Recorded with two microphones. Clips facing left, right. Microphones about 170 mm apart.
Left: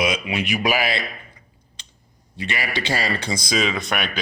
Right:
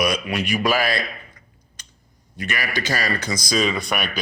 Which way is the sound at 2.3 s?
25° left (ahead or behind).